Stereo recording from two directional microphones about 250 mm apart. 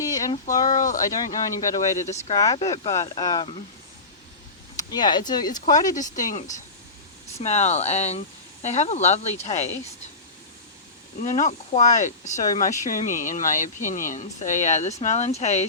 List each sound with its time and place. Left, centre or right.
0.0 s a sound: centre
0.7 s speech: left
1.5 s speech: centre
4.8 s speech: centre
6.0 s speech: left
11.2 s speech: left